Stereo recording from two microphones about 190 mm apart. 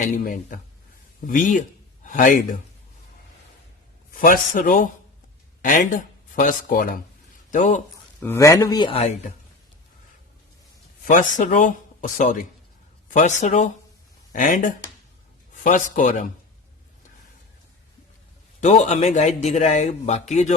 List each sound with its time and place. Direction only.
0.0 s speech: 45° left (ahead or behind)
4.2 s speech: 45° left (ahead or behind)
7.5 s a man's voice: 35° left (ahead or behind)
8.2 s speech: 15° left (ahead or behind); by 9.3 s 30° left (ahead or behind)
11.0 s a man's voice: 45° left (ahead or behind)
18.6 s a man's voice: 35° left (ahead or behind)